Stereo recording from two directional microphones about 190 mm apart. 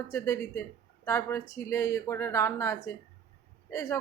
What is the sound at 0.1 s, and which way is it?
Speech, 15° left (ahead or behind).